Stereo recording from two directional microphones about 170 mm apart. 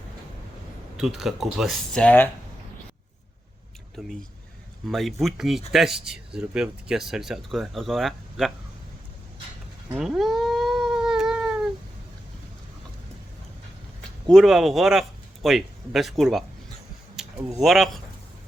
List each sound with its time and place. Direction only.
0.9 s speech: centre (ahead or behind)
4.0 s speech: centre (ahead or behind)
9.9 s cat: 5° right (ahead or behind)
14.3 s a man's voice: centre (ahead or behind)
17.2 s a sound: 5° right (ahead or behind)
17.6 s speech: centre (ahead or behind)